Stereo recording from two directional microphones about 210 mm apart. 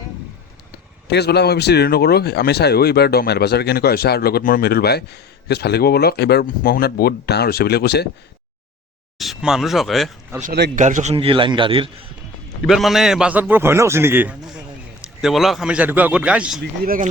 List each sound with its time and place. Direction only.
1.1 s speech: 50° left (ahead or behind)
9.1 s a man's voice: centre (ahead or behind)
10.4 s a man's voice: 50° right (ahead or behind)
10.8 s a man's voice: 35° right (ahead or behind)
12.6 s a man's voice: centre (ahead or behind)
16.8 s speech: 40° right (ahead or behind)